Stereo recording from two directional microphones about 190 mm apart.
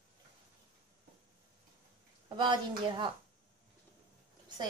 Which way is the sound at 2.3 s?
25° right (ahead or behind).